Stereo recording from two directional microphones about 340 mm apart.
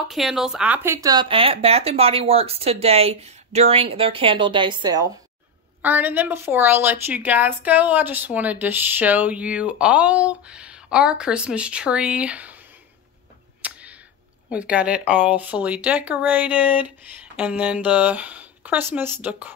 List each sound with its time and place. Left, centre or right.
0.1 s a woman's voice: centre
13.6 s a sound: centre
14.5 s a woman's voice: centre